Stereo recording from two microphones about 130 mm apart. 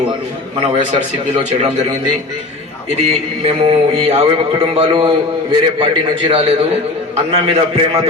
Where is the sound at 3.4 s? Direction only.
45° right (ahead or behind).